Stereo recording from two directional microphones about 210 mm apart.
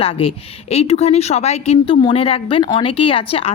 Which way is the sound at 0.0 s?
25° left (ahead or behind).